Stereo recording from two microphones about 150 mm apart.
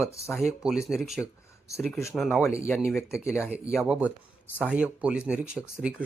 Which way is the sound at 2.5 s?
20° left (ahead or behind).